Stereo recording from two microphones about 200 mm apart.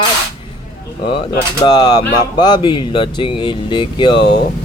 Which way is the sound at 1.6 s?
20° left (ahead or behind).